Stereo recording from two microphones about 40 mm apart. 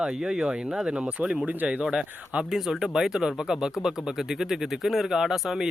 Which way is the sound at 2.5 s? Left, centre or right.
Centre.